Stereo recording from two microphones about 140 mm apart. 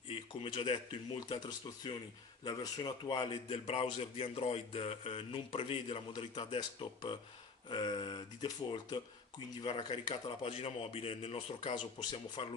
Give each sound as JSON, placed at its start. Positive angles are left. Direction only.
{"t": 0.1, "sound": "speech", "side_deg": 45}
{"t": 1.4, "sound": "a man's voice", "side_deg": 30}
{"t": 11.7, "sound": "a man's voice", "side_deg": 35}